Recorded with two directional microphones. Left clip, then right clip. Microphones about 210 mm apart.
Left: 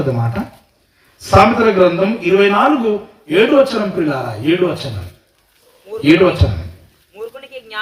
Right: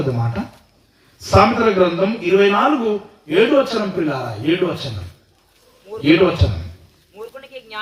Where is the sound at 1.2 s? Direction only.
45° left (ahead or behind).